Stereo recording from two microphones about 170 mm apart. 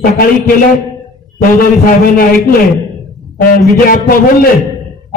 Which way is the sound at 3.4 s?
60° left (ahead or behind).